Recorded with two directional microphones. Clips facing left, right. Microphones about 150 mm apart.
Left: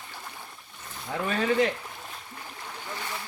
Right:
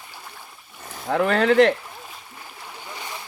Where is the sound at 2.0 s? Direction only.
5° right (ahead or behind).